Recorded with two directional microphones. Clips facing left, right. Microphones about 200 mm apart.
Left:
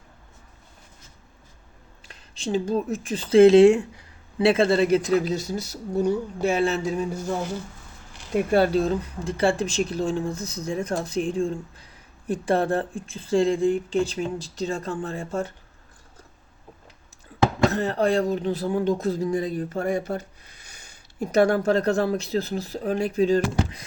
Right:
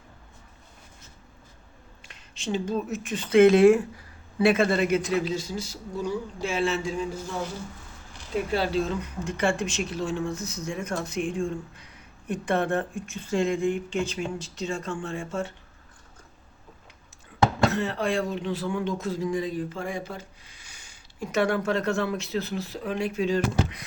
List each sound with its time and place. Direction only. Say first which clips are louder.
2.0 s speech: left 2 dB; 35° left (ahead or behind)
8.4 s speech: left 6 dB; 55° left (ahead or behind); by 15.5 s 40° left (ahead or behind)
17.7 s speech: left 4 dB; 40° left (ahead or behind)